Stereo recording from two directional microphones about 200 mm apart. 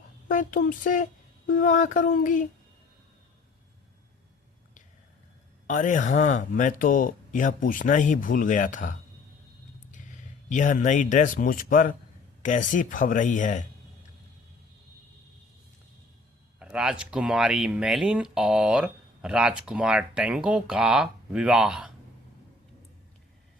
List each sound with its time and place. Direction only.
0.3 s speech: 40° left (ahead or behind)
5.6 s speech: 40° left (ahead or behind)
16.6 s speech: 5° right (ahead or behind)